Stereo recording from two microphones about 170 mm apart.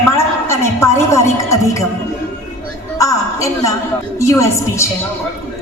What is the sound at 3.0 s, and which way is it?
A woman's voice, 20° left (ahead or behind).